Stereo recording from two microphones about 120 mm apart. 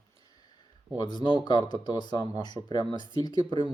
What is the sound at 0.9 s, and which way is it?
Speech, 40° left (ahead or behind).